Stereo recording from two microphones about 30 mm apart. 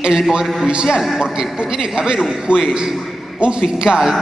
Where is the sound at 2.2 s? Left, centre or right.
Centre.